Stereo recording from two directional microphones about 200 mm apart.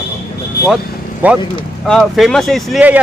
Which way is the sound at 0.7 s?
5° right (ahead or behind).